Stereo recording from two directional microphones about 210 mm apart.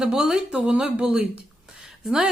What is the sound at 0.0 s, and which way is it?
Speech, 5° right (ahead or behind).